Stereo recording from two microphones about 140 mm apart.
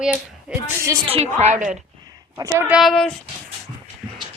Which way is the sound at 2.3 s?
25° right (ahead or behind).